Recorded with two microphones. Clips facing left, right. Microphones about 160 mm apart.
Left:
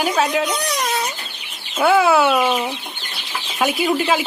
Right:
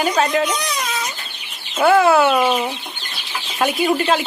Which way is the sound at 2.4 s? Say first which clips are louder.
Right 1 dB; 10° right (ahead or behind).